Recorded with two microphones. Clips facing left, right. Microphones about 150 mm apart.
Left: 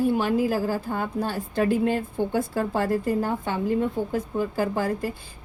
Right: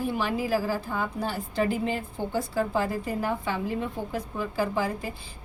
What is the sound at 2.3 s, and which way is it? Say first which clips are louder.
A woman's voice: right 2 dB; 60° left (ahead or behind).